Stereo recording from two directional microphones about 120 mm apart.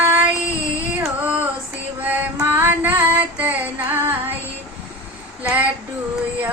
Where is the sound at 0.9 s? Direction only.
10° right (ahead or behind).